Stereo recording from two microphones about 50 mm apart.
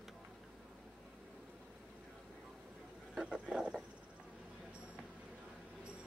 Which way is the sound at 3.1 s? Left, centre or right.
Centre.